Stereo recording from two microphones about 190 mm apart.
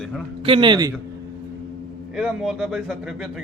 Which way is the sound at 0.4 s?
25° right (ahead or behind).